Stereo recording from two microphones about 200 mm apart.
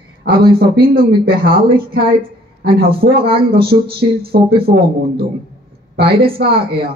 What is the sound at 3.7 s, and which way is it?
Speech, 35° right (ahead or behind).